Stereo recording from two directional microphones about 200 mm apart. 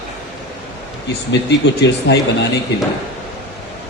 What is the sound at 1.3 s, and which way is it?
Speech, 60° left (ahead or behind).